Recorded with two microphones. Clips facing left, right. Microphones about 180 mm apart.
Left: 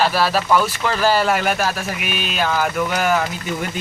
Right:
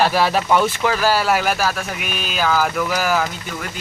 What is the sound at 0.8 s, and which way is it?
Speech, 5° right (ahead or behind).